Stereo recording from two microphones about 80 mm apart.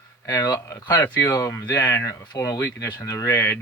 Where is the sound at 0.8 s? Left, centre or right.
Left.